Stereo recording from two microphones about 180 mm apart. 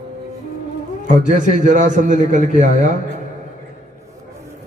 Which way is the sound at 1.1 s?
45° right (ahead or behind).